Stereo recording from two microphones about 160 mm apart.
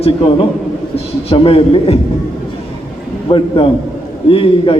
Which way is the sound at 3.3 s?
35° left (ahead or behind).